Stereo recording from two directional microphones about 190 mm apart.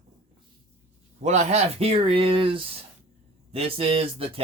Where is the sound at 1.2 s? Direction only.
35° right (ahead or behind).